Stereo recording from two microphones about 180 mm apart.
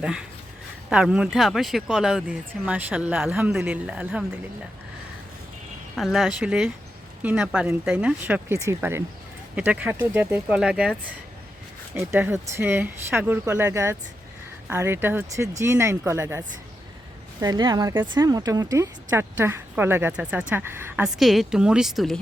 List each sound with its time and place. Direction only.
0.0 s speech: 5° right (ahead or behind)
6.0 s speech: centre (ahead or behind)
11.9 s speech: 10° right (ahead or behind)
17.4 s speech: 20° right (ahead or behind); by 22.2 s centre (ahead or behind)